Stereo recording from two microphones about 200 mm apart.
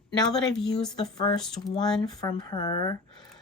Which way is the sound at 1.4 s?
Centre (ahead or behind).